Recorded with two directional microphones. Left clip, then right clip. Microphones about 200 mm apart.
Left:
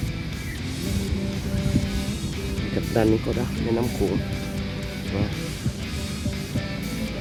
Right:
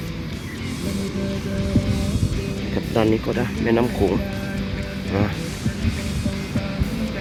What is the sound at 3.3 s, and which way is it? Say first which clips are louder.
Speech: right 5 dB; centre (ahead or behind).